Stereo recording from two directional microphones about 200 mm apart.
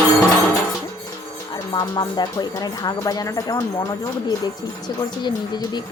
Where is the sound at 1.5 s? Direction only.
20° left (ahead or behind).